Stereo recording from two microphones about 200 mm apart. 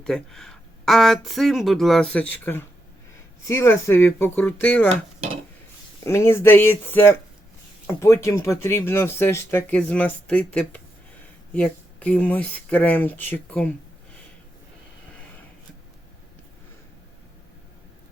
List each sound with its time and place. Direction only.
0.0 s speech: 5° left (ahead or behind)
6.0 s speech: 15° left (ahead or behind)